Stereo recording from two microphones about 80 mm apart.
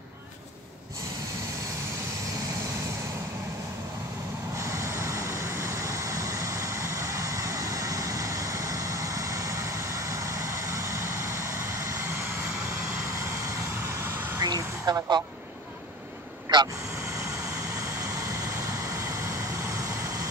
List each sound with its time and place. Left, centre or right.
4.6 s vehicle: right
13.7 s vehicle: right
14.4 s a sound: right
16.5 s vehicle: right
17.8 s vehicle: right